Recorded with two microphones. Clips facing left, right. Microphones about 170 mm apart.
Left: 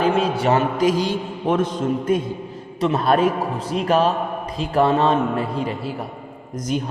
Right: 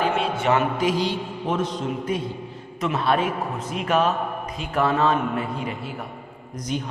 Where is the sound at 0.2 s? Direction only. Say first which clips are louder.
Left 3 dB; 35° left (ahead or behind).